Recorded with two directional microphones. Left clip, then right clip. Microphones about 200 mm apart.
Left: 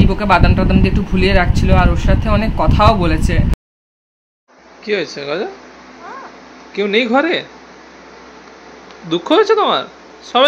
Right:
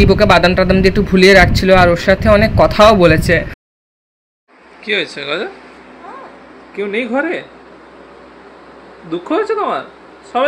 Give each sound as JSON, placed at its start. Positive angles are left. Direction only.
{"t": 0.1, "sound": "speech", "side_deg": -25}
{"t": 4.8, "sound": "speech", "side_deg": 15}
{"t": 6.8, "sound": "speech", "side_deg": 25}
{"t": 9.3, "sound": "speech", "side_deg": 25}